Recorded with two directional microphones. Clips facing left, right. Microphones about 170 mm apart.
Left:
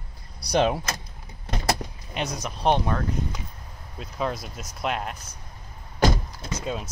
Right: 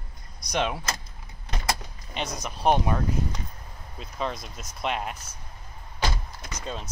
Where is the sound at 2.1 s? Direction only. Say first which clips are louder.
Left 2 dB; 5° left (ahead or behind).